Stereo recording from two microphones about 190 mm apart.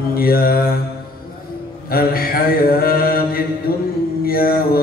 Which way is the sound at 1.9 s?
50° left (ahead or behind).